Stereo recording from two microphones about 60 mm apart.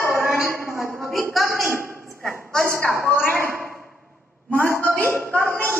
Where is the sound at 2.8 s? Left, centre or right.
Centre.